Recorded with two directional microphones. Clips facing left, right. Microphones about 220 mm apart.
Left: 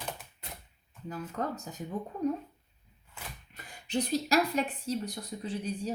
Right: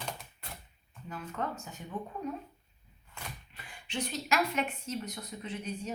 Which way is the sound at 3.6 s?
40° left (ahead or behind).